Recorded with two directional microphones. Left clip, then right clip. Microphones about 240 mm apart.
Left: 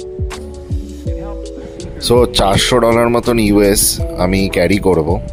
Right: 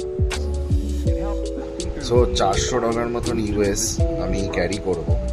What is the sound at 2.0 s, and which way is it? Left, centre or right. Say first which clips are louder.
Speech: left 7 dB; left.